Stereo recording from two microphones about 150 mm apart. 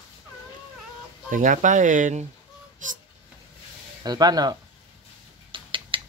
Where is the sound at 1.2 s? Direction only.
60° right (ahead or behind).